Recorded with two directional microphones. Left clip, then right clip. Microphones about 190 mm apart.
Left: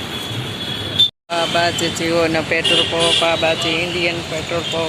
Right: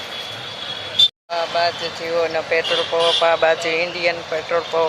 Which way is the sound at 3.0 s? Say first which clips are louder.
Even; 20° right (ahead or behind).